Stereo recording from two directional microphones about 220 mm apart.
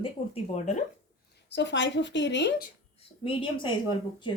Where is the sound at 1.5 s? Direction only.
55° left (ahead or behind).